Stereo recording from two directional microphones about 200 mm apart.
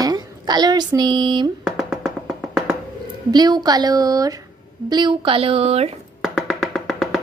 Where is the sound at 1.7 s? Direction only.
Centre (ahead or behind).